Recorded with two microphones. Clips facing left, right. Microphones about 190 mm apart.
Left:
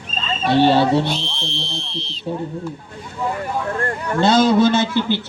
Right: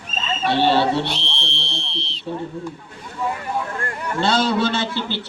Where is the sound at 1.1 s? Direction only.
75° right (ahead or behind).